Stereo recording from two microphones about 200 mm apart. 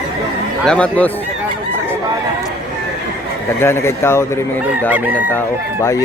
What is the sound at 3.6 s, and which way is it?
Speech, 10° left (ahead or behind).